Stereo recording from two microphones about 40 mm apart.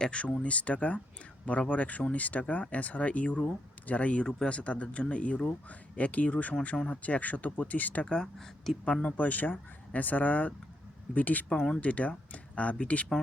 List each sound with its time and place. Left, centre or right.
0.0 s speech: left
8.0 s speech: centre
8.8 s speech: left
9.1 s speech: left